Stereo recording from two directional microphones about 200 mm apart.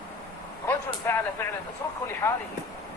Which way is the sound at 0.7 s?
10° left (ahead or behind).